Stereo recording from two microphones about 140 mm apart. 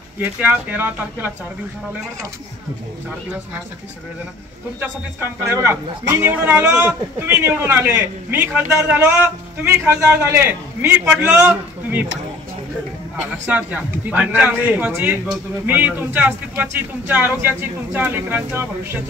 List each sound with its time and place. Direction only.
0.2 s speech: 10° right (ahead or behind)
4.7 s speech: 15° right (ahead or behind)
13.2 s speech: 10° right (ahead or behind)